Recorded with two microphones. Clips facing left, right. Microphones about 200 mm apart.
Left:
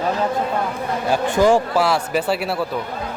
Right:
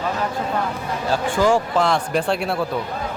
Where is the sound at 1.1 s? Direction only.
15° left (ahead or behind).